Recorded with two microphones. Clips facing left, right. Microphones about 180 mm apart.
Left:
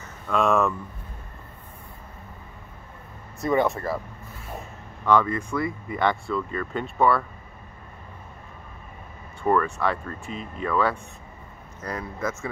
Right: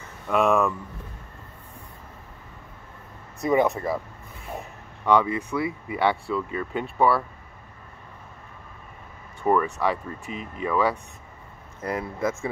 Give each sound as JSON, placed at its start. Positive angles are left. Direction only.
{"t": 0.3, "sound": "speech", "side_deg": -15}
{"t": 3.5, "sound": "speech", "side_deg": -20}
{"t": 5.0, "sound": "speech", "side_deg": -15}
{"t": 9.4, "sound": "speech", "side_deg": -15}
{"t": 11.8, "sound": "speech", "side_deg": -25}